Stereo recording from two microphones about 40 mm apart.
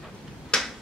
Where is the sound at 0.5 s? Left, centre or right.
Left.